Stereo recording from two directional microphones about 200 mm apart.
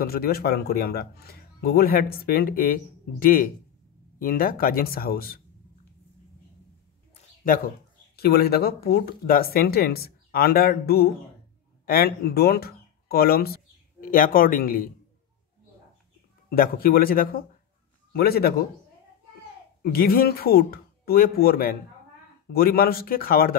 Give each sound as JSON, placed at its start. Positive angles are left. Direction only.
{"t": 0.0, "sound": "speech", "side_deg": 50}
{"t": 8.2, "sound": "speech", "side_deg": 50}
{"t": 16.4, "sound": "speech", "side_deg": 50}
{"t": 19.8, "sound": "speech", "side_deg": 50}